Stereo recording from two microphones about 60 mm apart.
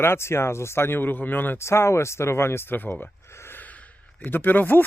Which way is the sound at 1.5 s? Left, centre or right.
Left.